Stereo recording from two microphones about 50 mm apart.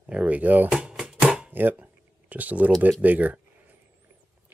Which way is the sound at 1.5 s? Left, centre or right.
Right.